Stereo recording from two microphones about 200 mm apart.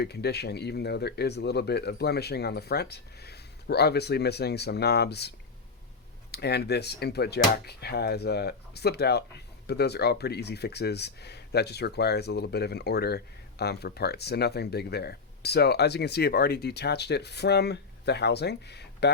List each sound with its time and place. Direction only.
0.0 s speech: 55° left (ahead or behind)
6.3 s speech: 55° left (ahead or behind)